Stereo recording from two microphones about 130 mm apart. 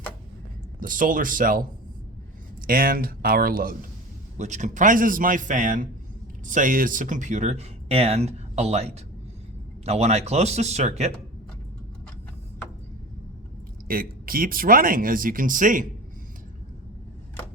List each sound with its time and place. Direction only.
0.8 s speech: 90° right
2.6 s speech: 90° right
4.4 s speech: 65° right (ahead or behind)
13.8 s speech: 90° right